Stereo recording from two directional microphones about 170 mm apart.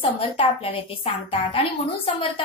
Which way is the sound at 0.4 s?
30° left (ahead or behind).